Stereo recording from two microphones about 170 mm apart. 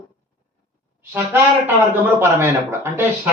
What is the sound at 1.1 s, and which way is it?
Honk, 10° right (ahead or behind).